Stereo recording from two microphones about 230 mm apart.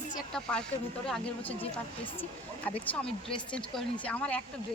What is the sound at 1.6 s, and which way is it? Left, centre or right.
Speech, left.